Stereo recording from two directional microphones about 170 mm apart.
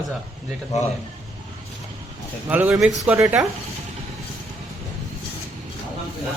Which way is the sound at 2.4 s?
10° right (ahead or behind).